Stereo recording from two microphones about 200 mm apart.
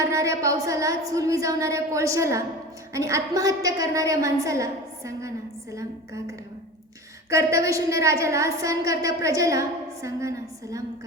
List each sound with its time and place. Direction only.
0.1 s a woman's voice: 15° right (ahead or behind)